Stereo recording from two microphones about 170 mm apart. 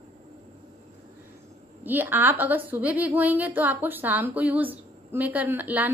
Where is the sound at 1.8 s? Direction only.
10° right (ahead or behind).